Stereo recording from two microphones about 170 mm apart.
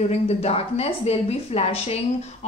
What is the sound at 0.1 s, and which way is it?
A woman's voice, 35° left (ahead or behind).